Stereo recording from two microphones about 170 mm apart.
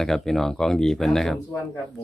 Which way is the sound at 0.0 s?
Centre (ahead or behind).